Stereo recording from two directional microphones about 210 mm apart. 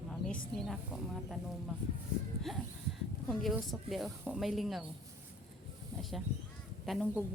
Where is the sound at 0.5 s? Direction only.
Centre (ahead or behind).